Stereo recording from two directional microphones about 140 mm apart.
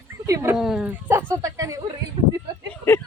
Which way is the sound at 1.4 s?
25° right (ahead or behind).